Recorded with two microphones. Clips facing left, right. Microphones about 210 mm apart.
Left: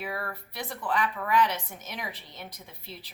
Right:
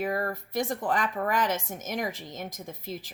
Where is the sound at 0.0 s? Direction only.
45° right (ahead or behind).